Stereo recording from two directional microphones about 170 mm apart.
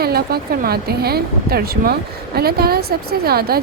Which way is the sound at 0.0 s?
65° right (ahead or behind).